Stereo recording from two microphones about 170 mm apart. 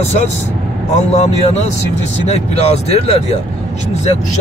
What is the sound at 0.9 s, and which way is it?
Speech, 40° left (ahead or behind).